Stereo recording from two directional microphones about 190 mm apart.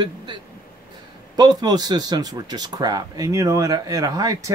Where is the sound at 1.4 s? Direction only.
20° right (ahead or behind).